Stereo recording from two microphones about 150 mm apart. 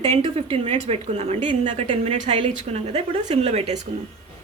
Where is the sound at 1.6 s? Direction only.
35° right (ahead or behind).